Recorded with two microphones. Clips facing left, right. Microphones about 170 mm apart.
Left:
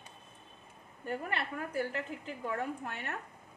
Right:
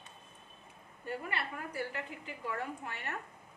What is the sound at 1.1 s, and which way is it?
A woman's voice, 50° left (ahead or behind).